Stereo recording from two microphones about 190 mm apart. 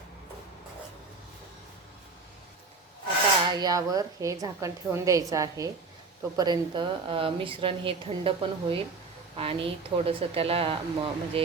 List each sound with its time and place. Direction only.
3.5 s a woman's voice: 20° right (ahead or behind)